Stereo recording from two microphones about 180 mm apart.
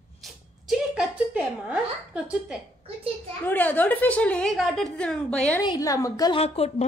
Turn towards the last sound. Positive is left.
turn(degrees=35)  # may be behind; listen again after turning